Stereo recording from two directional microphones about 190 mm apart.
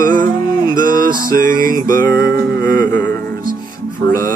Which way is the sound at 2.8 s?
10° left (ahead or behind).